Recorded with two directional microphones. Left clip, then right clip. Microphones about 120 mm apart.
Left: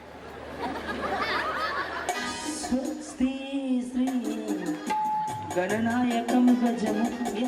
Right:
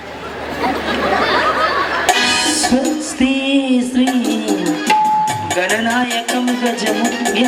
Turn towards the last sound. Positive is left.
turn(degrees=-15)  # may be behind; listen again after turning